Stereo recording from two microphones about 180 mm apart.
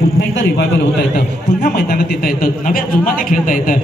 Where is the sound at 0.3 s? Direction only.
90° left.